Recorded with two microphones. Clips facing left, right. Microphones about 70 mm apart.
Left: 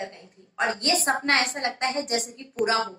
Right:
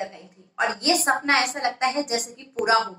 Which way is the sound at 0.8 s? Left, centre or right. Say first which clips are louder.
Right 4 dB; right.